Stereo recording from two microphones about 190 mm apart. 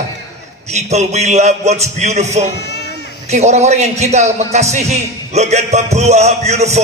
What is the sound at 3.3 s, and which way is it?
A man's voice, 35° right (ahead or behind).